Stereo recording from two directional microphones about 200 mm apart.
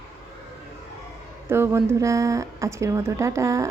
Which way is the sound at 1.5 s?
10° right (ahead or behind).